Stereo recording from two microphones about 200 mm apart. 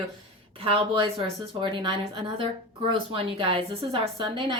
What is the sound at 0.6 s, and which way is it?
Speech, 25° right (ahead or behind).